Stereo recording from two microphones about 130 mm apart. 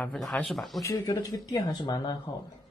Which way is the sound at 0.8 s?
25° left (ahead or behind).